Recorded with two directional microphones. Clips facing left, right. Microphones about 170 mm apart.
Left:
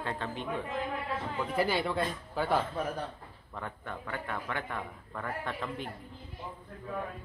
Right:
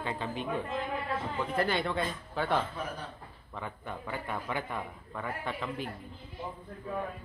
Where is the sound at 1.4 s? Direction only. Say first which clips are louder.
Left 1 dB; 5° left (ahead or behind).